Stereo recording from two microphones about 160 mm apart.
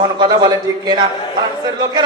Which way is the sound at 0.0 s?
25° right (ahead or behind).